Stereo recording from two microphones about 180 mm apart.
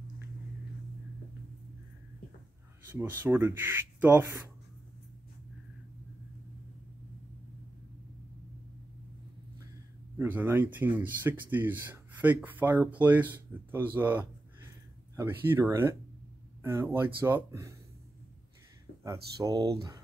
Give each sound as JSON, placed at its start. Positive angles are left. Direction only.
{"t": 2.9, "sound": "speech", "side_deg": -10}
{"t": 10.1, "sound": "speech", "side_deg": -10}
{"t": 19.3, "sound": "speech", "side_deg": -20}